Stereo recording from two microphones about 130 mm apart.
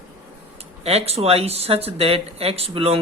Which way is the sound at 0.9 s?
50° right (ahead or behind).